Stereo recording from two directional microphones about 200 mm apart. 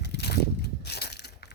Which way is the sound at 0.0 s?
55° left (ahead or behind).